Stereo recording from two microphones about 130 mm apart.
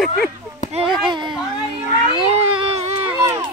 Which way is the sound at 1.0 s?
35° right (ahead or behind).